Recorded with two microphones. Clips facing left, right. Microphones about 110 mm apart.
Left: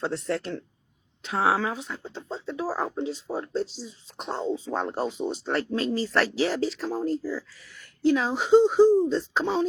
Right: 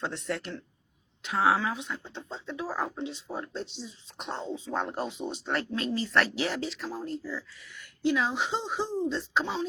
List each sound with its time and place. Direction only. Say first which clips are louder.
0.0 s speech: left 5 dB; 30° left (ahead or behind)